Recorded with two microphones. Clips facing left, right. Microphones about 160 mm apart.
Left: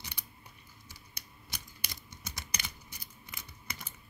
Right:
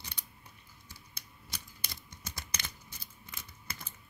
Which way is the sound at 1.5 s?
10° left (ahead or behind).